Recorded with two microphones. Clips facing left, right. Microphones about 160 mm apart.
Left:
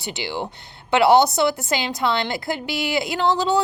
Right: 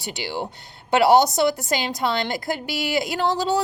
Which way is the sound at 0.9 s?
40° right (ahead or behind).